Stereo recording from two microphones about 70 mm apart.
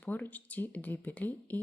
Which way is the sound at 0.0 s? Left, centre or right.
Left.